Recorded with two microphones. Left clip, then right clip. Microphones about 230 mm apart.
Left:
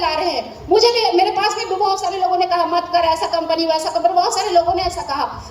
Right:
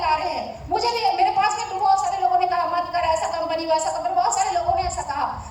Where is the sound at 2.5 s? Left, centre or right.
Left.